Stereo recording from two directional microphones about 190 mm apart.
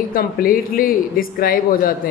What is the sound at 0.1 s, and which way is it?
Speech, 50° left (ahead or behind).